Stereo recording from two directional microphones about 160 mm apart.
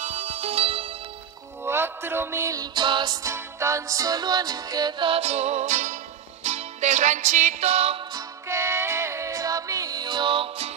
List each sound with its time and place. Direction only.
0.0 s music: 45° right (ahead or behind)
1.6 s music: 15° right (ahead or behind); by 8.0 s 40° right (ahead or behind)
8.1 s music: 20° right (ahead or behind)